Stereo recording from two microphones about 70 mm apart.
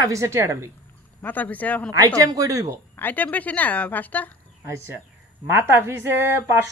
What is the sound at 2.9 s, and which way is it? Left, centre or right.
A woman's voice, left.